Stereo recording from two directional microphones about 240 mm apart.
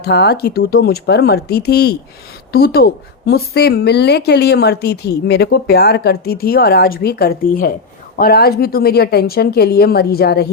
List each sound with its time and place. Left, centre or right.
0.0 s a woman's voice: left